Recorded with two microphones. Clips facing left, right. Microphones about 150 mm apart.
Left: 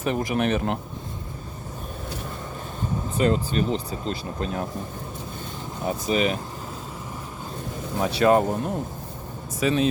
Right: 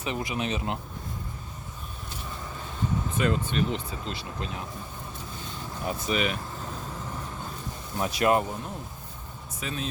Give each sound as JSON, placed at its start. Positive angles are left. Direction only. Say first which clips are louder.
{"t": 0.0, "sound": "speech", "louder": "left 7 dB", "side_deg": 50}
{"t": 3.2, "sound": "speech", "louder": "left 5 dB", "side_deg": 30}
{"t": 5.8, "sound": "speech", "louder": "left 5 dB", "side_deg": 30}
{"t": 7.9, "sound": "speech", "louder": "left 5 dB", "side_deg": 35}
{"t": 9.6, "sound": "speech", "louder": "left 13 dB", "side_deg": 90}